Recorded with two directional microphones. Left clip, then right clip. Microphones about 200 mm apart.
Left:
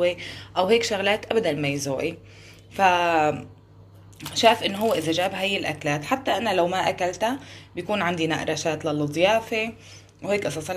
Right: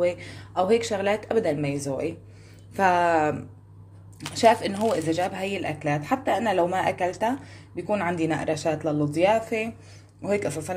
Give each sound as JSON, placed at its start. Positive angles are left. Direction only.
{"t": 0.0, "sound": "speech", "side_deg": -10}
{"t": 2.7, "sound": "speech", "side_deg": -15}
{"t": 4.8, "sound": "speech", "side_deg": -5}